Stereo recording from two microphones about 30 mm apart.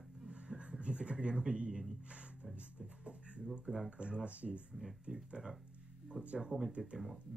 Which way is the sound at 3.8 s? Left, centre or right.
Right.